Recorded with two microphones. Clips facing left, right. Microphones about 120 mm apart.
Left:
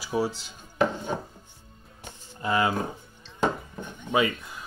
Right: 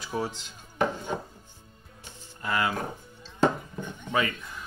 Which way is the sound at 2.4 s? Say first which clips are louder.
Left 3 dB; 20° left (ahead or behind).